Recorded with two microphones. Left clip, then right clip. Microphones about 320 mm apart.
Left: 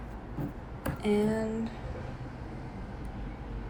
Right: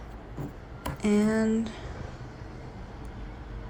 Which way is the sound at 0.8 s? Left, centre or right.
Centre.